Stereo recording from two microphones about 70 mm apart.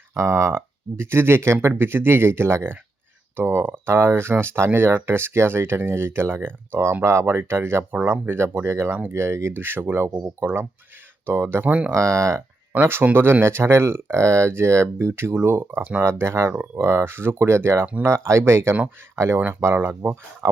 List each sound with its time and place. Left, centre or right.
0.2 s speech: right
11.9 s speech: right
12.7 s speech: right
19.4 s speech: right
19.6 s speech: right
20.4 s speech: right